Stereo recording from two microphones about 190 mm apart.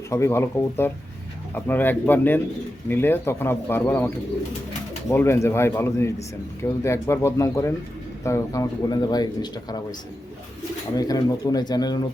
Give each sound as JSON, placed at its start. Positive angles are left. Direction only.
{"t": 0.1, "sound": "a man's voice", "side_deg": 15}
{"t": 10.9, "sound": "a man's voice", "side_deg": 20}